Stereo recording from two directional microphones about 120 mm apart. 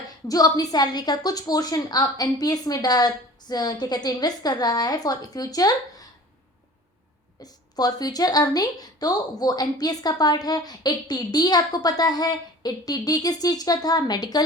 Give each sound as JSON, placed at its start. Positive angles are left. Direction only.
{"t": 0.3, "sound": "speech", "side_deg": 30}
{"t": 7.4, "sound": "speech", "side_deg": 35}